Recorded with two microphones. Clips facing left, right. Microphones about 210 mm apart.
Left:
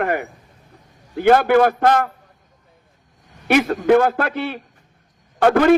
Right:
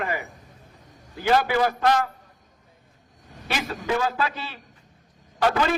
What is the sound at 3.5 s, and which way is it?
A man's voice, 60° left (ahead or behind).